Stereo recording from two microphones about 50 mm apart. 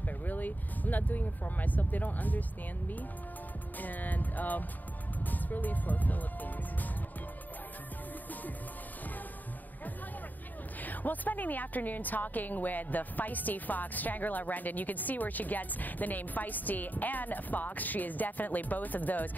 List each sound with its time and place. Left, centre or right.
0.2 s speech: left
3.8 s music: left
5.2 s a woman's voice: left
10.8 s a woman's voice: left